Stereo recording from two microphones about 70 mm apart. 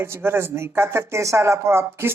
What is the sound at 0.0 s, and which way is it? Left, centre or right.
Speech, right.